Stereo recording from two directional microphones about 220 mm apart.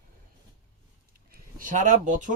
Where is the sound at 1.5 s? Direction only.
35° right (ahead or behind).